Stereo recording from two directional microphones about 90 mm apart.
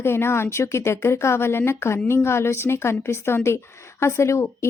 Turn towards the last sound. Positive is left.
turn(degrees=30)  # may be behind; listen again after turning